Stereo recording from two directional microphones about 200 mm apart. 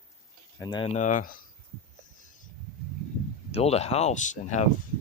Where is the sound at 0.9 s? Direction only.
40° left (ahead or behind).